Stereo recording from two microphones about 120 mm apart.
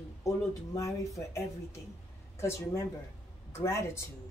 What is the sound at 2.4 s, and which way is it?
Speech, 25° left (ahead or behind).